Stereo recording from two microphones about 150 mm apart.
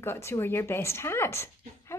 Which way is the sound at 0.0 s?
15° left (ahead or behind).